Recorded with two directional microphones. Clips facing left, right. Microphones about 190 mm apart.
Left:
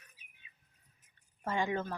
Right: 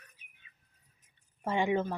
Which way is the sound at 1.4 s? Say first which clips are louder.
Right 5 dB; 20° right (ahead or behind).